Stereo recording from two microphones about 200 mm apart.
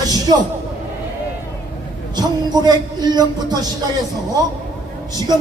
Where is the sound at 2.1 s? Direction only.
20° right (ahead or behind).